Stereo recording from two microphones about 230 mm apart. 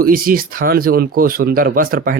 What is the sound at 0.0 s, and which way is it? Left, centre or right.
Speech, right.